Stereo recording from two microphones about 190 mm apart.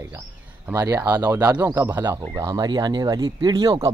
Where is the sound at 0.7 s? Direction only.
15° right (ahead or behind).